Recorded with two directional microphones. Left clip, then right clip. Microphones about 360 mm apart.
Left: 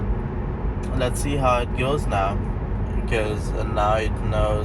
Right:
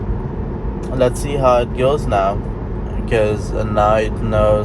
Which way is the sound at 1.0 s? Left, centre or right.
Right.